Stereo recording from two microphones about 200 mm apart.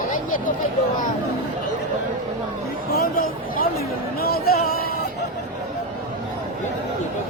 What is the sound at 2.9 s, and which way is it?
Speech, 50° left (ahead or behind).